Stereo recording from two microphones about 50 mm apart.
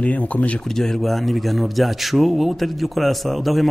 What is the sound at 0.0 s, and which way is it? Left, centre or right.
Speech, left.